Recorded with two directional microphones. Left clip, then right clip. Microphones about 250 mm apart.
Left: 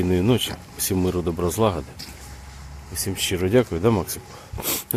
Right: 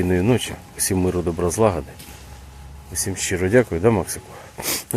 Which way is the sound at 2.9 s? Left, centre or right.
Centre.